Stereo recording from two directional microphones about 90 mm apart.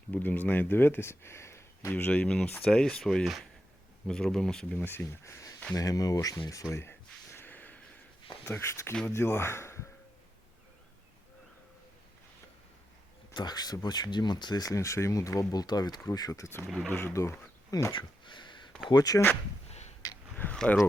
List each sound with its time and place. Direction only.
0.1 s speech: 20° left (ahead or behind)
4.8 s speech: 25° left (ahead or behind); by 6.4 s 40° left (ahead or behind)
6.7 s a sound: 25° left (ahead or behind)
8.4 s speech: 30° left (ahead or behind)
13.3 s speech: 50° left (ahead or behind); by 16.6 s 30° left (ahead or behind)
16.6 s speech: 5° right (ahead or behind)
16.9 s speech: 30° left (ahead or behind)
17.9 s a sound: 60° left (ahead or behind)
18.9 s speech: 45° left (ahead or behind)
20.3 s speech: 15° left (ahead or behind)